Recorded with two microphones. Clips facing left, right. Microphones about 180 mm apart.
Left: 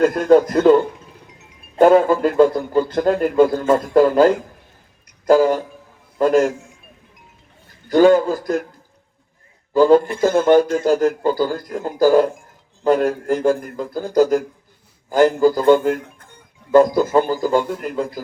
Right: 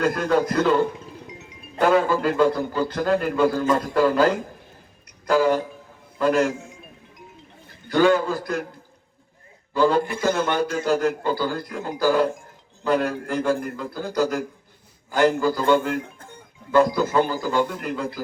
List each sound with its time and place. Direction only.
0.0 s a man's voice: 45° left (ahead or behind)
1.8 s a man's voice: 45° left (ahead or behind)
7.9 s a man's voice: 45° left (ahead or behind)
9.7 s a man's voice: 45° left (ahead or behind)